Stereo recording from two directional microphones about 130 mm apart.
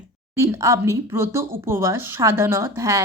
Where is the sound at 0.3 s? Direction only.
20° right (ahead or behind).